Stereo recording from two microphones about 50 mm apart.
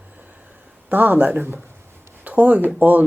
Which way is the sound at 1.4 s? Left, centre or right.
Right.